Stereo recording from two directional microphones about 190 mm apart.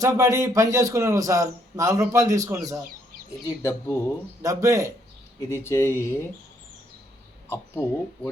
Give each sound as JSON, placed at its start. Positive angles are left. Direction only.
{"t": 0.0, "sound": "a man's voice", "side_deg": -15}
{"t": 3.4, "sound": "speech", "side_deg": 15}
{"t": 4.4, "sound": "a man's voice", "side_deg": -15}
{"t": 5.5, "sound": "speech", "side_deg": 15}
{"t": 7.5, "sound": "speech", "side_deg": 15}